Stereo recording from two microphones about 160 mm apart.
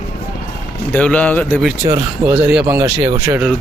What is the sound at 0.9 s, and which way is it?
Speech, 10° left (ahead or behind).